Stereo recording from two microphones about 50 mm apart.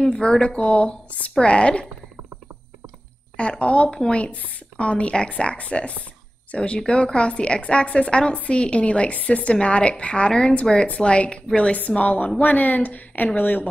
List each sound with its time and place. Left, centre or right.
0.0 s a woman's voice: centre
3.3 s a woman's voice: left